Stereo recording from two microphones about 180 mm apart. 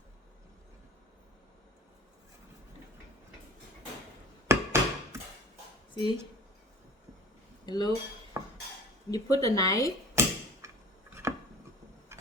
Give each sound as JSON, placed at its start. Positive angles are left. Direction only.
{"t": 4.4, "sound": "a sound", "side_deg": -15}
{"t": 5.9, "sound": "speech", "side_deg": 25}
{"t": 7.6, "sound": "speech", "side_deg": 20}
{"t": 8.4, "sound": "cutlery", "side_deg": -20}
{"t": 9.0, "sound": "speech", "side_deg": 20}
{"t": 10.2, "sound": "tick-tock", "side_deg": -15}
{"t": 10.6, "sound": "a sound", "side_deg": -15}
{"t": 12.1, "sound": "tick-tock", "side_deg": -15}